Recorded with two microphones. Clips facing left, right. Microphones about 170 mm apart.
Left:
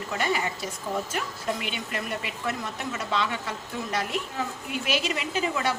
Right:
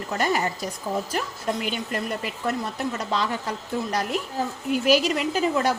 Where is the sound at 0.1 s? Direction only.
40° right (ahead or behind).